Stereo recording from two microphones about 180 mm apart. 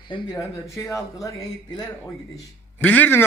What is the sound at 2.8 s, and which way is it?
Speech, 10° left (ahead or behind).